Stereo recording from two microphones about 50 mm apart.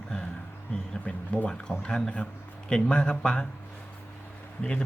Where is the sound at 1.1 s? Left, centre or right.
Left.